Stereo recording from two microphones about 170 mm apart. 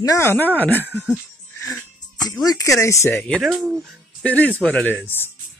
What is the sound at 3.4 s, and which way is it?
Speech, centre (ahead or behind).